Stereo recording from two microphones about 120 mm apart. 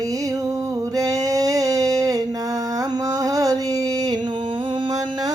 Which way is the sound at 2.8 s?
30° right (ahead or behind).